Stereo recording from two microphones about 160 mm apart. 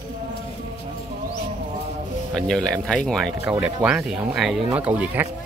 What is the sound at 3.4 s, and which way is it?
Speech, 5° right (ahead or behind).